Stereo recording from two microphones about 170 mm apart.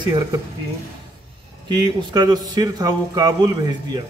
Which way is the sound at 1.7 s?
25° right (ahead or behind).